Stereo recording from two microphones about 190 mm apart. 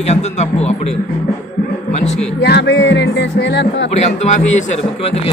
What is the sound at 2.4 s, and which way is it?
Music, 65° left (ahead or behind).